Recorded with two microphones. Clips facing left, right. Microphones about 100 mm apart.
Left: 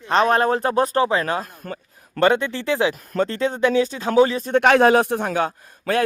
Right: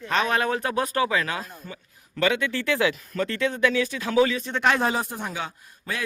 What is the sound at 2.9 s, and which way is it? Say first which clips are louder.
Speech: left 3 dB; 50° left (ahead or behind).